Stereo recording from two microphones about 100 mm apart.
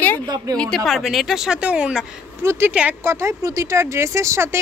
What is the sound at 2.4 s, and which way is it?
Speech, 25° right (ahead or behind).